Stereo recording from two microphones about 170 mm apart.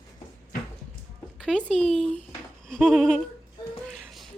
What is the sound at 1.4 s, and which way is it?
Speech, 5° left (ahead or behind).